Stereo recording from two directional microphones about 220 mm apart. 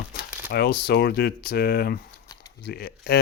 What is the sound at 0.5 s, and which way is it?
Speech, 45° left (ahead or behind).